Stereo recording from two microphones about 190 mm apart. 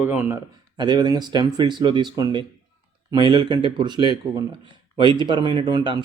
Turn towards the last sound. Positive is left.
turn(degrees=-25)  # may be behind; listen again after turning